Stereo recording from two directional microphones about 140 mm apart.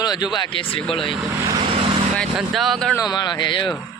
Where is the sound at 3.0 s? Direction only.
30° left (ahead or behind).